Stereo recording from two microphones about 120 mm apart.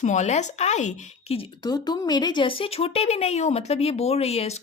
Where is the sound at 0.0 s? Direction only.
80° left.